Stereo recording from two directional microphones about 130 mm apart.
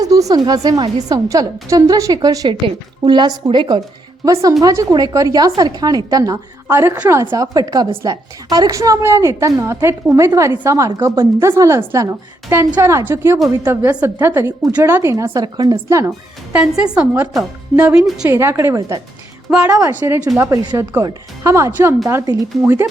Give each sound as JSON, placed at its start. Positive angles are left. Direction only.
{"t": 0.0, "sound": "a woman's voice", "side_deg": -25}
{"t": 4.3, "sound": "a woman's voice", "side_deg": -25}
{"t": 16.6, "sound": "a woman's voice", "side_deg": -10}
{"t": 18.3, "sound": "a woman's voice", "side_deg": -20}